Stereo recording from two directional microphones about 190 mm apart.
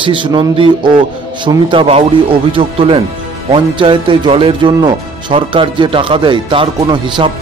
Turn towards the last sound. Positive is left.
turn(degrees=-25)  # may be behind; listen again after turning